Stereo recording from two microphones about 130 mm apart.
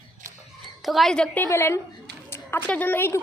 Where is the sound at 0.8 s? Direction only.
Centre (ahead or behind).